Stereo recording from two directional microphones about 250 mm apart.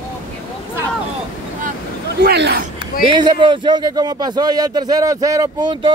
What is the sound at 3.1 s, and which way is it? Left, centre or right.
Speech, centre.